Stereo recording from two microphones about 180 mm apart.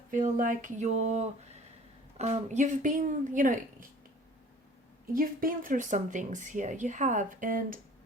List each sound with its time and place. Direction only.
0.1 s speech: 45° right (ahead or behind)
5.1 s speech: 50° right (ahead or behind)